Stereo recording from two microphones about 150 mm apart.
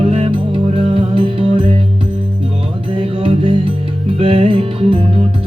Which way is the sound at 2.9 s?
40° right (ahead or behind).